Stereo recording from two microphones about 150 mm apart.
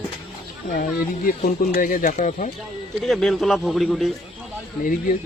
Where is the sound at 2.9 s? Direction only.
Centre (ahead or behind).